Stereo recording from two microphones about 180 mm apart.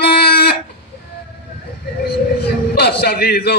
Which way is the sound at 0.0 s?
60° left (ahead or behind).